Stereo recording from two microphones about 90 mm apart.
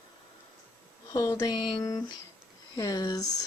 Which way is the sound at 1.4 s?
45° left (ahead or behind).